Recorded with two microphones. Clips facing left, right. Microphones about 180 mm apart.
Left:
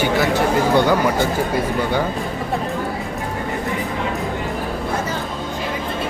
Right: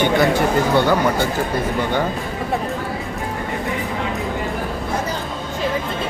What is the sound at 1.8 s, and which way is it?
Speech, 10° left (ahead or behind).